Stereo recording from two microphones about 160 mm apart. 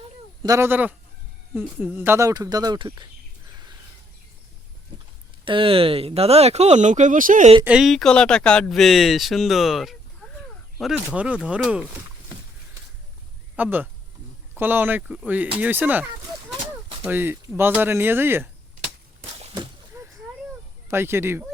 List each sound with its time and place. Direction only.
0.4 s speech: 20° right (ahead or behind)
5.5 s speech: 35° right (ahead or behind); by 7.5 s 55° right (ahead or behind)
7.6 s speech: 5° right (ahead or behind)
13.6 s speech: 10° right (ahead or behind)
17.1 s speech: 15° right (ahead or behind)
19.9 s a sound: 15° right (ahead or behind)
20.8 s speech: 15° right (ahead or behind)